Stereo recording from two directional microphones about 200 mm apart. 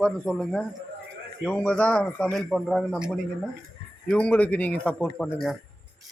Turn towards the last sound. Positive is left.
turn(degrees=5)  # may be behind; listen again after turning